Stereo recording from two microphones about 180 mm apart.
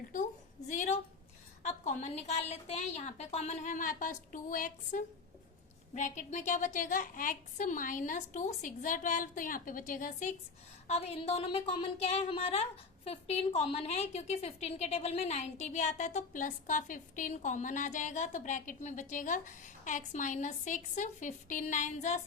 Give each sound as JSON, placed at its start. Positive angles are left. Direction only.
{"t": 0.7, "sound": "a woman's voice", "side_deg": 45}
{"t": 10.8, "sound": "a woman's voice", "side_deg": 35}